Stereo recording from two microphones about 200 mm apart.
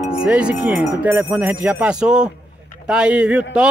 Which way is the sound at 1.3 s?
5° right (ahead or behind).